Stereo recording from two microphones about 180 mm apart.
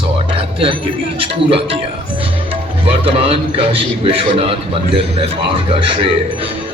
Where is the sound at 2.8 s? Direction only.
30° right (ahead or behind).